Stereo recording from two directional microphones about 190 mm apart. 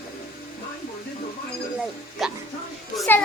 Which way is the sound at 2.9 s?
Centre (ahead or behind).